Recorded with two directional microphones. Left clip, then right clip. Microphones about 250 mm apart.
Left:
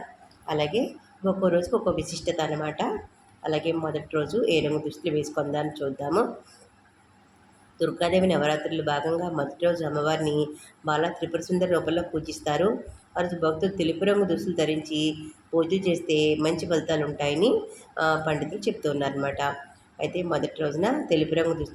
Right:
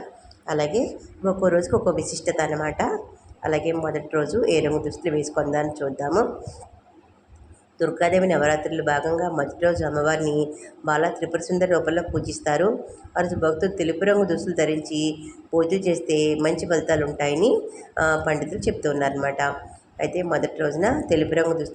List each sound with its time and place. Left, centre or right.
0.4 s speech: centre
3.5 s speech: right
4.1 s speech: centre
7.8 s speech: centre